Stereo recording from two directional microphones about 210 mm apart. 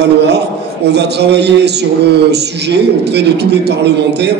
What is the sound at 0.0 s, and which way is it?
A man's voice, 55° right (ahead or behind).